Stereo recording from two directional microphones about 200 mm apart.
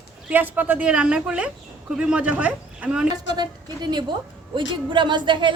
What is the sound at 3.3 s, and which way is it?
A woman's voice, 20° right (ahead or behind).